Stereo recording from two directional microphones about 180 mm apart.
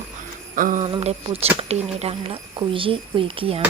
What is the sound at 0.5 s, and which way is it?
Jingle bell, 50° right (ahead or behind).